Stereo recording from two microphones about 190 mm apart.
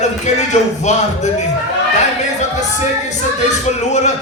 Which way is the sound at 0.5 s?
35° left (ahead or behind).